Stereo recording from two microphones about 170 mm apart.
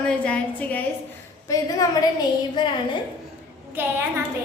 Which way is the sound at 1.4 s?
20° left (ahead or behind).